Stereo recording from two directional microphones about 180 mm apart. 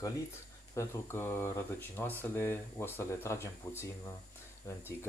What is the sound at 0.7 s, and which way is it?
Speech, 15° left (ahead or behind).